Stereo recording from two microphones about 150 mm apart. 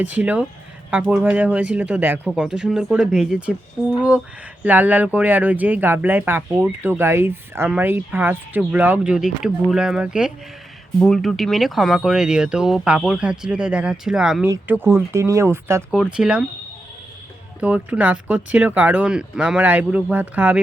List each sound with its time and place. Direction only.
0.0 s speech: 10° right (ahead or behind)
4.6 s speech: 10° right (ahead or behind)
14.4 s speech: 15° right (ahead or behind)
15.9 s speech: 5° right (ahead or behind)
17.6 s speech: 10° right (ahead or behind)